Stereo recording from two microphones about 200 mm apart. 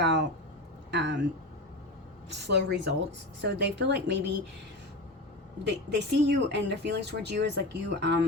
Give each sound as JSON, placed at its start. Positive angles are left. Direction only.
{"t": 0.0, "sound": "speech", "side_deg": -60}
{"t": 2.3, "sound": "speech", "side_deg": -60}
{"t": 5.6, "sound": "speech", "side_deg": -60}